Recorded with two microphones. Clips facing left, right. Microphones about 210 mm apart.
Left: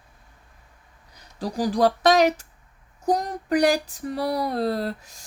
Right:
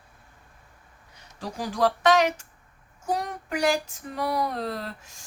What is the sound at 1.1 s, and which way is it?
Speech, 35° left (ahead or behind).